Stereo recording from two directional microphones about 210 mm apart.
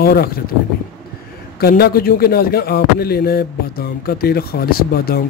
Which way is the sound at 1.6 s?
45° left (ahead or behind).